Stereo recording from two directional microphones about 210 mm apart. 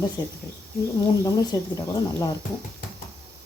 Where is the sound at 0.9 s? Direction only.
20° left (ahead or behind).